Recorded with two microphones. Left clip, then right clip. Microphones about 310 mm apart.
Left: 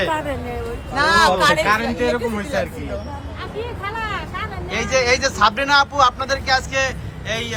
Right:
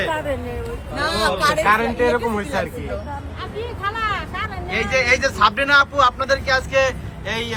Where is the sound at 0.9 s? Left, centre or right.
Centre.